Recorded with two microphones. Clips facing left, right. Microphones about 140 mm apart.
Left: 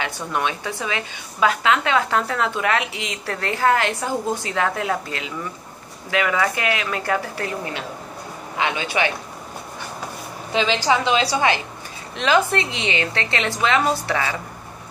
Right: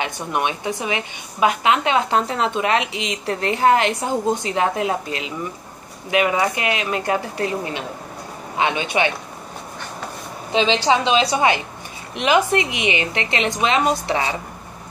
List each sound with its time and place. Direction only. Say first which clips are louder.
0.0 s a woman's voice: right 2 dB; 20° right (ahead or behind)
10.5 s a woman's voice: right 2 dB; 20° right (ahead or behind)